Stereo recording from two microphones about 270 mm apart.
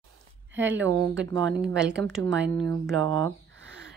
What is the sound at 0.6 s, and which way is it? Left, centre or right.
Speech, centre.